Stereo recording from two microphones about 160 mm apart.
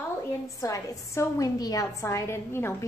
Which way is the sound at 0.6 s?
20° left (ahead or behind).